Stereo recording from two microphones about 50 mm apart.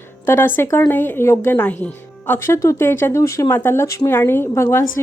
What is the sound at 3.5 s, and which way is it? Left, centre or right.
Speech, left.